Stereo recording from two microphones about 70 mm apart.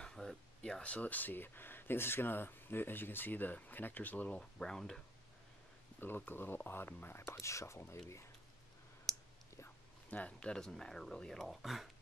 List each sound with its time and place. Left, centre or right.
0.0 s a sound: centre
0.6 s speech: centre
5.9 s speech: left
7.2 s speech: left
9.1 s clicking: centre
10.1 s speech: centre